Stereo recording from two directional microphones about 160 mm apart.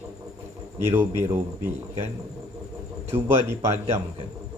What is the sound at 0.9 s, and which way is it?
Speech, 15° right (ahead or behind).